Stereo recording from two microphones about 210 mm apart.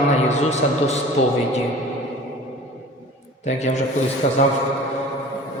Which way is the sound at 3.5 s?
35° left (ahead or behind).